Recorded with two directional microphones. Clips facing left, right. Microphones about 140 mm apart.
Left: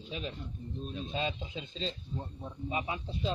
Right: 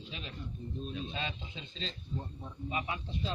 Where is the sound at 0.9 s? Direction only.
35° left (ahead or behind).